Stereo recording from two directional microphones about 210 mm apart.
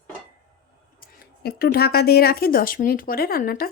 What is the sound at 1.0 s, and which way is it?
Speech, 45° left (ahead or behind).